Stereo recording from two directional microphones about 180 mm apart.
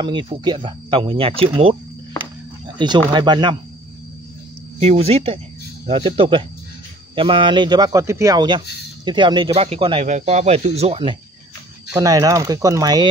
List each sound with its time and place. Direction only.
0.0 s speech: 25° right (ahead or behind)
3.1 s speech: 25° right (ahead or behind)
4.7 s speech: 35° right (ahead or behind)
11.9 s speech: 20° right (ahead or behind)